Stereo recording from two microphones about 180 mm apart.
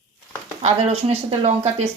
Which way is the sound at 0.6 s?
35° right (ahead or behind).